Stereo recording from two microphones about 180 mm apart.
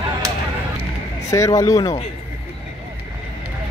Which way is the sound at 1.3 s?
15° left (ahead or behind).